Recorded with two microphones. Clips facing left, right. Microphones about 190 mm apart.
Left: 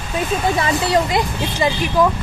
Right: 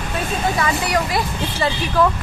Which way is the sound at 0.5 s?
25° left (ahead or behind).